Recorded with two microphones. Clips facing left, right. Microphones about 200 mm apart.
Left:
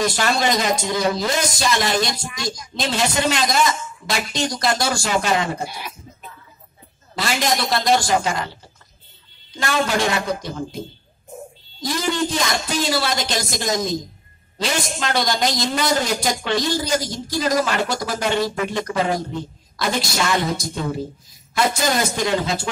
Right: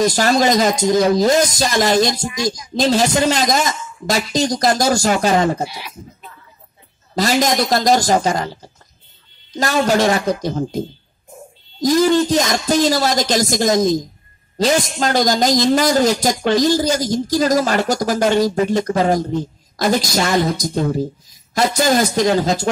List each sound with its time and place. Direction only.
0.0 s a man's voice: 40° right (ahead or behind)
5.7 s speech: 50° left (ahead or behind)
7.2 s a man's voice: 40° right (ahead or behind)
11.8 s a man's voice: 40° right (ahead or behind)
22.1 s a man's voice: 40° right (ahead or behind)